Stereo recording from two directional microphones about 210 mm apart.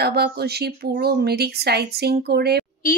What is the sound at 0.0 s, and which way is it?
A woman's voice, 50° right (ahead or behind).